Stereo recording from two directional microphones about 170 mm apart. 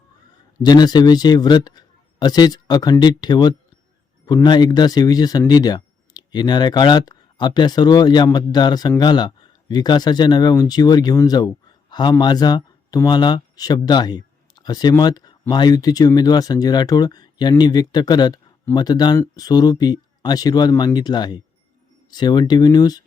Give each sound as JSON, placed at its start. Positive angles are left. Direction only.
{"t": 0.6, "sound": "a man's voice", "side_deg": 25}